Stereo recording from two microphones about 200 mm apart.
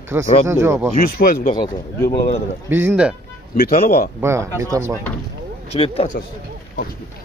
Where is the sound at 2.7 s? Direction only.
10° right (ahead or behind).